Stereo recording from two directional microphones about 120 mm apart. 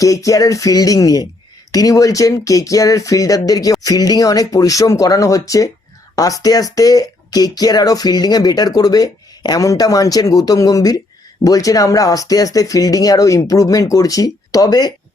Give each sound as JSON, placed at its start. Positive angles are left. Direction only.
{"t": 0.0, "sound": "speech", "side_deg": 30}